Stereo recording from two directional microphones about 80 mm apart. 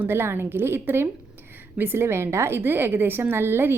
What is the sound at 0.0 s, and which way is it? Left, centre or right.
A woman's voice, right.